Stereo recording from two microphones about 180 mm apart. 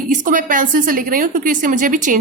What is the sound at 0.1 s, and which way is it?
A woman's voice, 45° right (ahead or behind).